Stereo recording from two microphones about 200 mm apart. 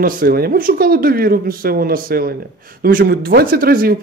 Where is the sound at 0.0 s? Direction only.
45° right (ahead or behind).